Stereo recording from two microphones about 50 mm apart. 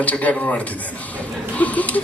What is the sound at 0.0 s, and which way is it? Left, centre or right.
A man's voice, left.